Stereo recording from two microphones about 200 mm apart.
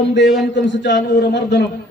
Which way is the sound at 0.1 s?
60° left (ahead or behind).